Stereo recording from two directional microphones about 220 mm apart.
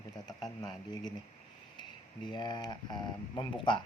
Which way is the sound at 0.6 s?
20° left (ahead or behind).